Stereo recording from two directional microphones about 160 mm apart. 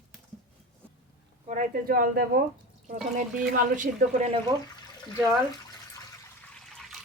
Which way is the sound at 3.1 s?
55° right (ahead or behind).